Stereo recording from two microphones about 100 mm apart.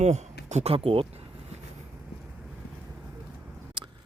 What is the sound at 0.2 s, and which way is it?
Speech, 85° right.